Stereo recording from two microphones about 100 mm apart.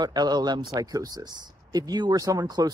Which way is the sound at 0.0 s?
45° right (ahead or behind).